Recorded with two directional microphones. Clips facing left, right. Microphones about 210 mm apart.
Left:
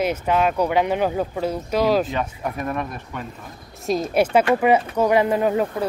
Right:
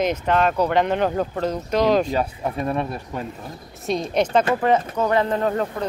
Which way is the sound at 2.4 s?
25° right (ahead or behind).